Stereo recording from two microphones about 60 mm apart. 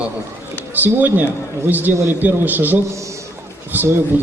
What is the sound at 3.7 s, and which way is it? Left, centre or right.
Speech, right.